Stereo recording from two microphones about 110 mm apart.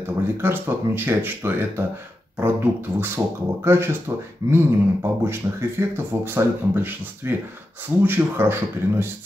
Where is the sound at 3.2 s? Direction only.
20° right (ahead or behind).